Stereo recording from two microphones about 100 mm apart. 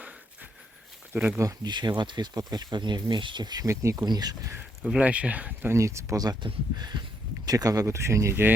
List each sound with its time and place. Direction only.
1.1 s speech: 15° right (ahead or behind)
1.6 s speech: 45° right (ahead or behind)
4.8 s speech: 15° right (ahead or behind)
5.7 s speech: 30° right (ahead or behind)